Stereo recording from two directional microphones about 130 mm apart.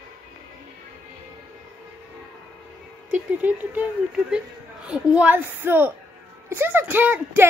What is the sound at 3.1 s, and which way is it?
A woman's voice, 10° right (ahead or behind).